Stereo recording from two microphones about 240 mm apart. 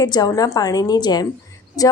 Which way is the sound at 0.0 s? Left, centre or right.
Centre.